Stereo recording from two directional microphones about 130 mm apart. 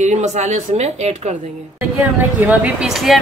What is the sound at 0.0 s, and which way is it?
Speech, 65° right (ahead or behind).